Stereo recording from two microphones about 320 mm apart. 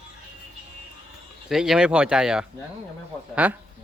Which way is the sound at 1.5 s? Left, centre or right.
Centre.